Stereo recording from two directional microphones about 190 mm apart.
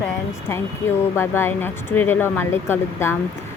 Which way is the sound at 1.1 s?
15° left (ahead or behind).